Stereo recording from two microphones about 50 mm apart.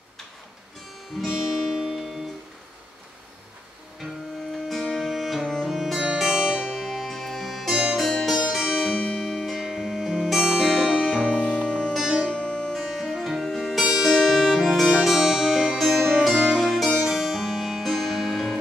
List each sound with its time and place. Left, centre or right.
1.3 s guitar: centre
4.9 s music: centre
10.3 s music: centre
11.3 s music: left
12.8 s music: centre
14.1 s music: centre
15.9 s music: centre